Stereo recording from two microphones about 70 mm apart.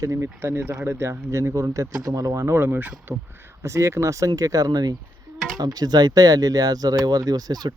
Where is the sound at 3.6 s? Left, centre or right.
Right.